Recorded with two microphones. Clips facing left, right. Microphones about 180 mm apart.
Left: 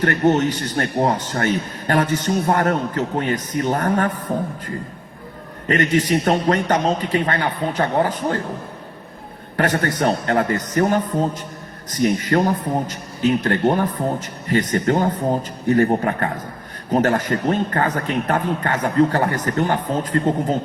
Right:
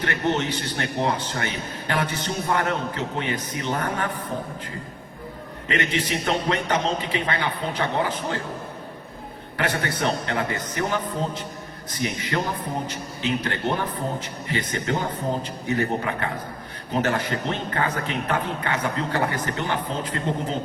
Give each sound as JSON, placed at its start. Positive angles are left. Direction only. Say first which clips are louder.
{"t": 0.0, "sound": "a man's voice", "louder": "left 7 dB", "side_deg": 45}
{"t": 5.6, "sound": "a man's voice", "louder": "left 7 dB", "side_deg": 45}
{"t": 9.6, "sound": "a man's voice", "louder": "left 6 dB", "side_deg": 45}